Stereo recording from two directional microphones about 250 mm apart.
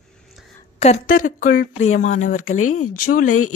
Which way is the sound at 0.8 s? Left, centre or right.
Left.